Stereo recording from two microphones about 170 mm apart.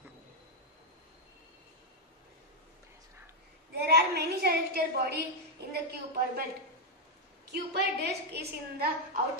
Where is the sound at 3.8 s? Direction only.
70° right (ahead or behind).